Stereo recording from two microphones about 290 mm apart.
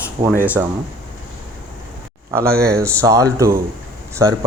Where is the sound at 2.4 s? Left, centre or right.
Right.